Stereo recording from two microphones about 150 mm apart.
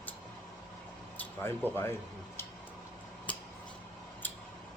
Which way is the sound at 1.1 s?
15° left (ahead or behind).